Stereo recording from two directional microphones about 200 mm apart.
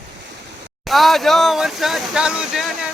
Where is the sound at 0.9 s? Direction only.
Centre (ahead or behind).